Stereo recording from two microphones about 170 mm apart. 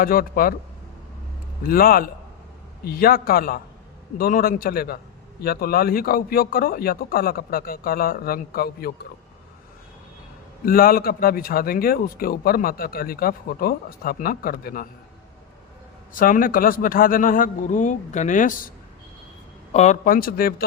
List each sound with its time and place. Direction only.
0.0 s a man's voice: 60° left (ahead or behind)
1.6 s a man's voice: 60° left (ahead or behind)
10.7 s a man's voice: 60° left (ahead or behind)
16.1 s a man's voice: 55° left (ahead or behind)
19.7 s a man's voice: 40° left (ahead or behind); by 20.7 s 60° left (ahead or behind)